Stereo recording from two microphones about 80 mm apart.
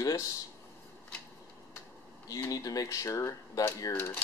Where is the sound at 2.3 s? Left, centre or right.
Left.